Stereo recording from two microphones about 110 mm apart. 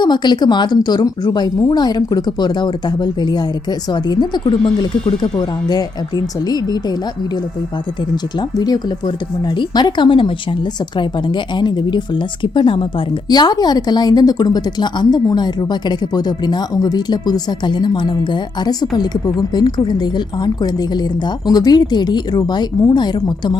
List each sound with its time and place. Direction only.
0.0 s speech: 40° left (ahead or behind)
8.1 s speech: 40° left (ahead or behind)